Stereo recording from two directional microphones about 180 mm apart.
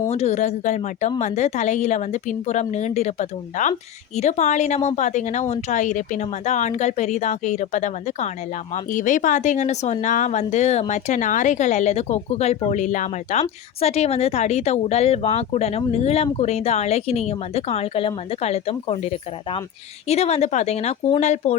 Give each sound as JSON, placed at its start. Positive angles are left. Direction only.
{"t": 0.1, "sound": "speech", "side_deg": 35}